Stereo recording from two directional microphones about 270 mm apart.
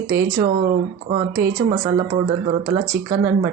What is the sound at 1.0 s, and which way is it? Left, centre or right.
Speech, right.